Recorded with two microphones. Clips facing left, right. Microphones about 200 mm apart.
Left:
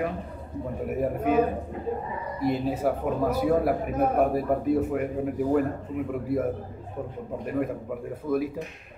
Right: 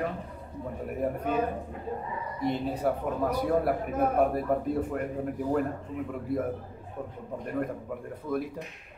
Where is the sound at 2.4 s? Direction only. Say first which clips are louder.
Left 3 dB; 5° left (ahead or behind).